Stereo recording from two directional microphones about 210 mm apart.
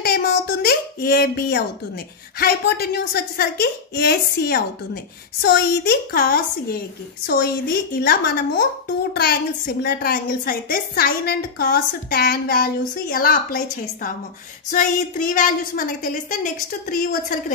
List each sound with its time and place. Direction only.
0.0 s a child's voice: 50° left (ahead or behind)
7.9 s a woman's voice: 45° left (ahead or behind)
14.7 s a woman's voice: 40° left (ahead or behind)